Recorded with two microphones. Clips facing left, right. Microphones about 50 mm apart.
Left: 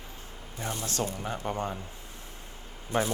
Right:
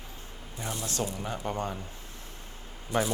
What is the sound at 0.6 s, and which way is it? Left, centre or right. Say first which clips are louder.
Speech: left 1 dB; left.